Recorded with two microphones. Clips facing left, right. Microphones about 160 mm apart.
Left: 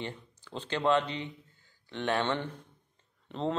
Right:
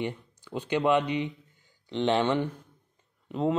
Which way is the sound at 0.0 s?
15° right (ahead or behind).